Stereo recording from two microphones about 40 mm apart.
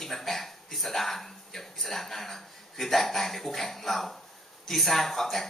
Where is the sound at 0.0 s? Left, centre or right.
Centre.